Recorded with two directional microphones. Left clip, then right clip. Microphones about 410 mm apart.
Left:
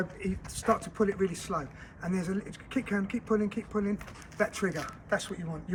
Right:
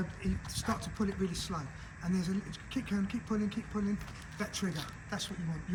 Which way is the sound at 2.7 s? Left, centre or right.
Centre.